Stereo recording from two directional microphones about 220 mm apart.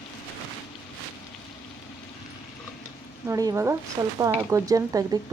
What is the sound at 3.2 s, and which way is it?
Speech, 15° right (ahead or behind).